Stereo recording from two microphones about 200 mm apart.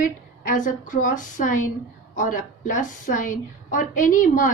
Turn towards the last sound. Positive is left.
turn(degrees=40)  # may be behind; listen again after turning